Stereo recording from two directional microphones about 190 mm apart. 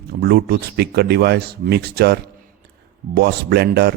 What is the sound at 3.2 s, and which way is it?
Speech, 60° right (ahead or behind).